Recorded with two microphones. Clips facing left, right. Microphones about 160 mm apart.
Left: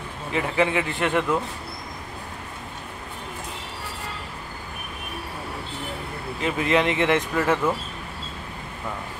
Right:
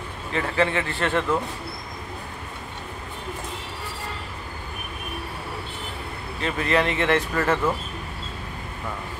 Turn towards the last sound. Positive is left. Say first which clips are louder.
# left 1 dB
turn(degrees=10)  # may be behind; listen again after turning